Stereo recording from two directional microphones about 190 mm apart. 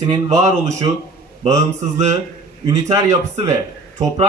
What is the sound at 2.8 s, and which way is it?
Speech, 15° right (ahead or behind).